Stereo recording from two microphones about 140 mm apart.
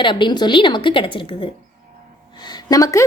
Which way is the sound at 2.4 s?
25° left (ahead or behind).